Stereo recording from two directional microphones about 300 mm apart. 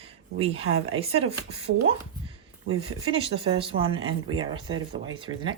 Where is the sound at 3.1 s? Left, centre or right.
Centre.